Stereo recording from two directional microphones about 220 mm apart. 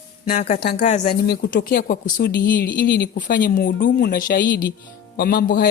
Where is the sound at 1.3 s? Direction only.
45° left (ahead or behind).